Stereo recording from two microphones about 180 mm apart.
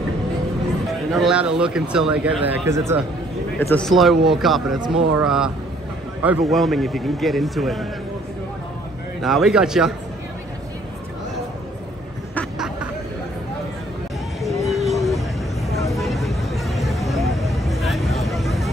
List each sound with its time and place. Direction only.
1.1 s a man's voice: 5° right (ahead or behind)
3.5 s a man's voice: 5° left (ahead or behind)
4.7 s speech: 25° right (ahead or behind)
5.2 s a man's voice: 5° right (ahead or behind)
9.2 s a man's voice: centre (ahead or behind)
14.4 s a sound: centre (ahead or behind)
15.9 s vehicle: centre (ahead or behind)